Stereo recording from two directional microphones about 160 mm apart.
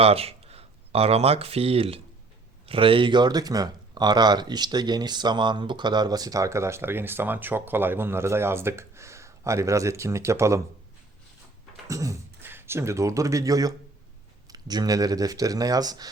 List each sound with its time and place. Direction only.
0.0 s speech: 40° right (ahead or behind); by 10.6 s 20° right (ahead or behind)
11.9 s speech: 20° right (ahead or behind)